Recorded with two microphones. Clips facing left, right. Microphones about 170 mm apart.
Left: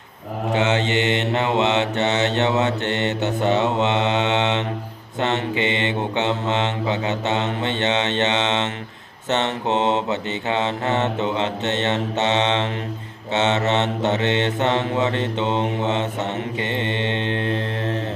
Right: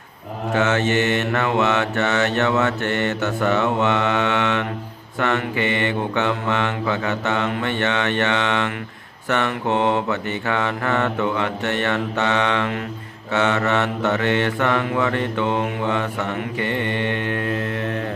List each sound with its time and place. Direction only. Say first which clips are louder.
0.5 s mantra: right 1 dB; 20° left (ahead or behind)